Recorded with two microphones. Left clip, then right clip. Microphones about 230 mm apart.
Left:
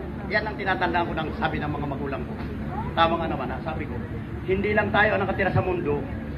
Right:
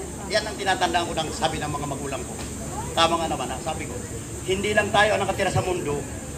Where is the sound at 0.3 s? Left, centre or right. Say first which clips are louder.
Right 1 dB; right.